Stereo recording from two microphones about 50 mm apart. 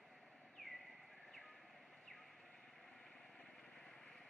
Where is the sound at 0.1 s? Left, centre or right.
Centre.